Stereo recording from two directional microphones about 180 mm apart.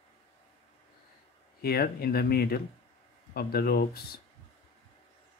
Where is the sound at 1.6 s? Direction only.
60° left (ahead or behind).